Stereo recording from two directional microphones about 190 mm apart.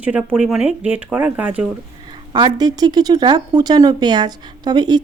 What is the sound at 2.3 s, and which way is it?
Speech, 20° right (ahead or behind).